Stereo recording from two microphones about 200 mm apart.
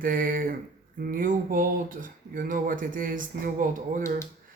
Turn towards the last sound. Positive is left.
turn(degrees=-40)  # may be behind; listen again after turning